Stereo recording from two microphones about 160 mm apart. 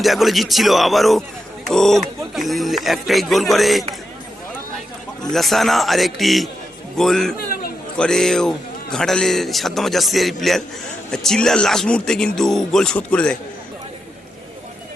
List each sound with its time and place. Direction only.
0.0 s a man's voice: centre (ahead or behind)
5.2 s a man's voice: centre (ahead or behind)
7.3 s a sound: 70° left (ahead or behind)
7.9 s a man's voice: 5° left (ahead or behind)